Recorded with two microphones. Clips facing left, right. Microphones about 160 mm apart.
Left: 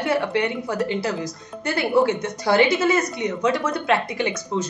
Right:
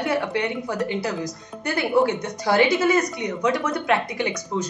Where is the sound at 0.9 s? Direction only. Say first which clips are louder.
Left 1 dB; 15° right (ahead or behind).